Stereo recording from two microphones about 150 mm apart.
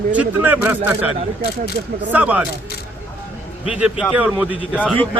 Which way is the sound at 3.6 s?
5° right (ahead or behind).